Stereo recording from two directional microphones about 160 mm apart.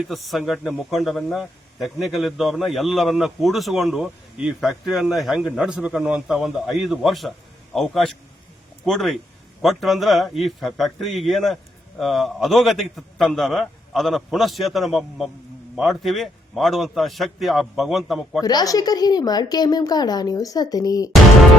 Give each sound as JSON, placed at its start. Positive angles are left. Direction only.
{"t": 0.0, "sound": "a man's voice", "side_deg": 0}
{"t": 18.4, "sound": "a woman's voice", "side_deg": 25}